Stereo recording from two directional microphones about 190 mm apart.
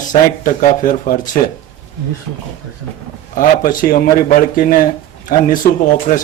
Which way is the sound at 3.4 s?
45° left (ahead or behind).